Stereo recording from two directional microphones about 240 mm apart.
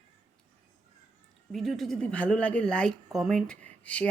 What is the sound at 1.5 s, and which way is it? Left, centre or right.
A woman's voice, centre.